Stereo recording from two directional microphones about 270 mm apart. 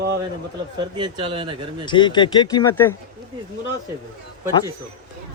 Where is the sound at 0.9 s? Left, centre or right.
Centre.